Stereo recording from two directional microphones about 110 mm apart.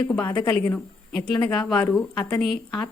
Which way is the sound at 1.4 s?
5° left (ahead or behind).